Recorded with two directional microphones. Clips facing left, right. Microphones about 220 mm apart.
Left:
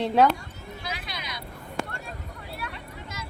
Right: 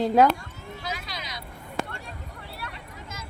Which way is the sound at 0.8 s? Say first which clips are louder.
Right 2 dB; 40° right (ahead or behind).